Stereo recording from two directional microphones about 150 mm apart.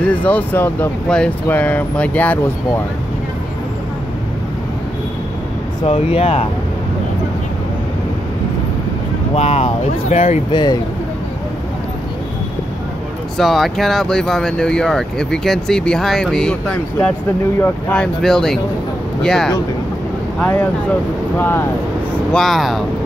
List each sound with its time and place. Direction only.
0.0 s speech: 10° left (ahead or behind)
5.9 s speech: 40° left (ahead or behind)
9.3 s speech: 45° left (ahead or behind)
10.5 s speech: 30° left (ahead or behind)
13.4 s speech: centre (ahead or behind)
21.4 s speech: 15° left (ahead or behind)
22.3 s speech: centre (ahead or behind)